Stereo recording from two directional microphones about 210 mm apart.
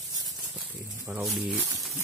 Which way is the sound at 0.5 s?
5° right (ahead or behind).